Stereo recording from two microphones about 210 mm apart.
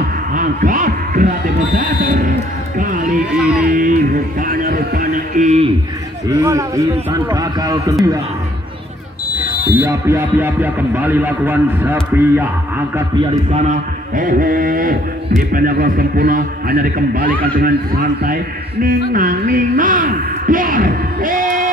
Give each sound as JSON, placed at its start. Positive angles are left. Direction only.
{"t": 0.3, "sound": "speech", "side_deg": -40}
{"t": 1.8, "sound": "mantra", "side_deg": -40}
{"t": 3.3, "sound": "speech", "side_deg": -5}
{"t": 3.6, "sound": "mantra", "side_deg": -40}
{"t": 6.2, "sound": "speech", "side_deg": -15}
{"t": 9.8, "sound": "speech", "side_deg": -10}
{"t": 13.5, "sound": "mantra", "side_deg": -35}